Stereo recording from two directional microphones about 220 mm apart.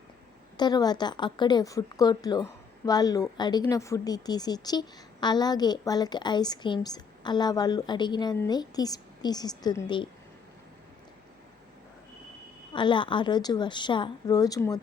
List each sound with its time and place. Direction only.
0.5 s a woman's voice: 20° left (ahead or behind)
12.7 s a woman's voice: 20° left (ahead or behind)